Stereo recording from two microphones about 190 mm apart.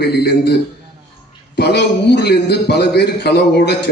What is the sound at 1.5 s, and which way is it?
Speech, 60° left (ahead or behind).